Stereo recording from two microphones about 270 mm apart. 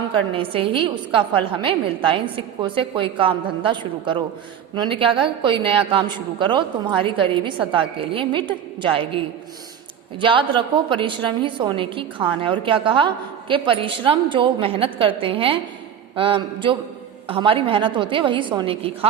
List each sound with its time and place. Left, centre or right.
0.3 s a woman's voice: centre